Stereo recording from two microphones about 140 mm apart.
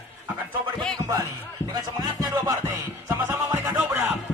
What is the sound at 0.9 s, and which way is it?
Music, 25° right (ahead or behind).